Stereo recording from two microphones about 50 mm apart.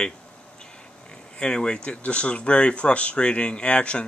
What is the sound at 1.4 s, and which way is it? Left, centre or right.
Speech, centre.